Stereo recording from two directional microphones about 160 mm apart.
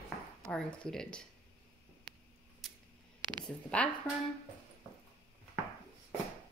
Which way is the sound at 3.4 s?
10° left (ahead or behind).